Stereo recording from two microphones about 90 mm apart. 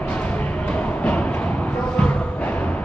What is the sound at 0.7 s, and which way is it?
Music, 15° left (ahead or behind).